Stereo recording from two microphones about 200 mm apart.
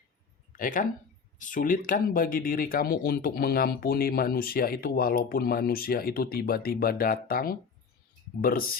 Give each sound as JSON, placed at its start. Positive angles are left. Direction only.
{"t": 0.5, "sound": "speech", "side_deg": 40}